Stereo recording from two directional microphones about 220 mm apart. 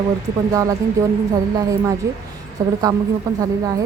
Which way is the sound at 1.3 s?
15° right (ahead or behind).